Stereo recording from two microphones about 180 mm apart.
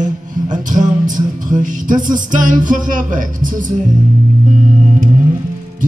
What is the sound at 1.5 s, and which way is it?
Music, 45° right (ahead or behind).